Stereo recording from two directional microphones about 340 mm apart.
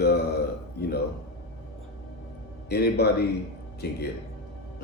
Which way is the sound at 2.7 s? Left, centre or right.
Left.